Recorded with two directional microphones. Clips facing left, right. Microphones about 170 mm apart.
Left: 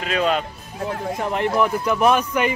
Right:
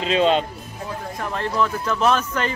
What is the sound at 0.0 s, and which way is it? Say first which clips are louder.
Speech: right 3 dB; 25° right (ahead or behind).